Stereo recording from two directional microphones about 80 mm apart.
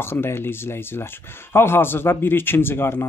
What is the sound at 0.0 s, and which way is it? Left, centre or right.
A man's voice, left.